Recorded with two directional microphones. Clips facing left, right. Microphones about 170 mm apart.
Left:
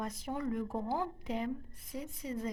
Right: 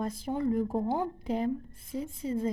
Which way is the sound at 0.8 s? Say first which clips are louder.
Right 5 dB; 25° right (ahead or behind).